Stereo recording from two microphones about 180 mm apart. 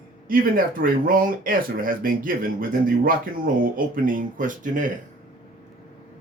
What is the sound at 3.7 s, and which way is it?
Speech, 50° right (ahead or behind).